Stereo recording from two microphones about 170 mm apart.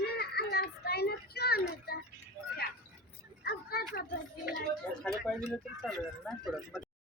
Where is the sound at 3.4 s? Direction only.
70° left (ahead or behind).